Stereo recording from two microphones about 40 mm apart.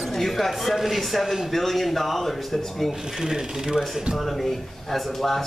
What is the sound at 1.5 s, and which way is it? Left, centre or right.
Speech, centre.